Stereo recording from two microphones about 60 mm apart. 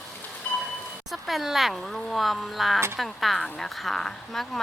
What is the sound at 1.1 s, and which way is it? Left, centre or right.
Speech, centre.